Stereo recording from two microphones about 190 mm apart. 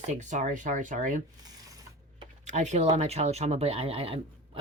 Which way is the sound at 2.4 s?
40° right (ahead or behind).